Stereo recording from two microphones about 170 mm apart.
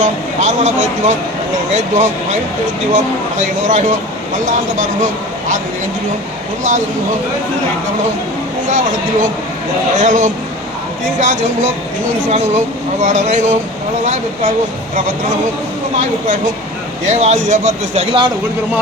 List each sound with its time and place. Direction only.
0.0 s speech: 45° right (ahead or behind)
3.6 s speech: 45° right (ahead or behind)
8.7 s speech: 45° right (ahead or behind)
17.1 s speech: 40° right (ahead or behind)